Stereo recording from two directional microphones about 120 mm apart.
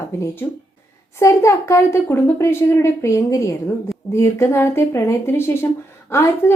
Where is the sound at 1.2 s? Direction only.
25° left (ahead or behind).